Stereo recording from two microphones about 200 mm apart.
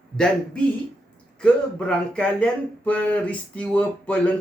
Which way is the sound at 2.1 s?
5° left (ahead or behind).